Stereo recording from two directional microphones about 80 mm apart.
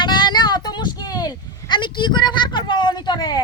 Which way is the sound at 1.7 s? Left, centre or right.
Left.